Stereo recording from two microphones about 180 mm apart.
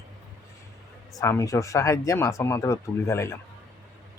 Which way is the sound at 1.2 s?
15° left (ahead or behind).